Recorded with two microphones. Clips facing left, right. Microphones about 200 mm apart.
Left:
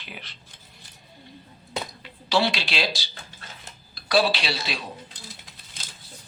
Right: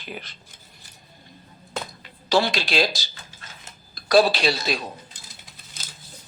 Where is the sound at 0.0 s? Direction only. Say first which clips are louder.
Right 6 dB; 45° right (ahead or behind).